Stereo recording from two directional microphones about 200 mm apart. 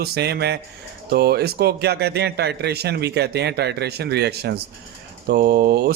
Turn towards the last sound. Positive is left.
turn(degrees=-55)  # may be behind; listen again after turning